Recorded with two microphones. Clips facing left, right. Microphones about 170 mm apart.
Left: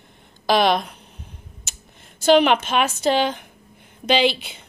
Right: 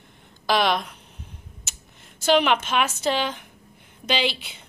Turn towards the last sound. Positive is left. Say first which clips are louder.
# left 6 dB
turn(degrees=20)  # may be behind; listen again after turning